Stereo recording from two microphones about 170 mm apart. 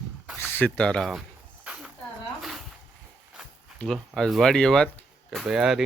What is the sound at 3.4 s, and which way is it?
Speech, centre (ahead or behind).